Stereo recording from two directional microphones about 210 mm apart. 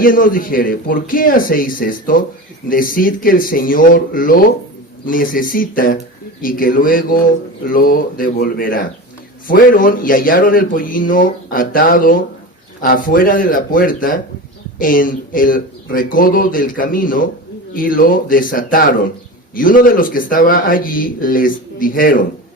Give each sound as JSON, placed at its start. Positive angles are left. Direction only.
{"t": 0.0, "sound": "a man's voice", "side_deg": 40}